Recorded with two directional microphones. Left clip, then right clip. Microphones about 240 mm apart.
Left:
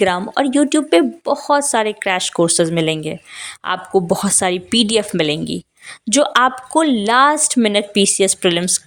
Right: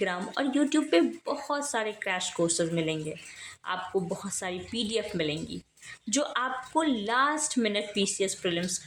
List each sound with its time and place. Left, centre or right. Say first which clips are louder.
0.0 s speech: left 14 dB; left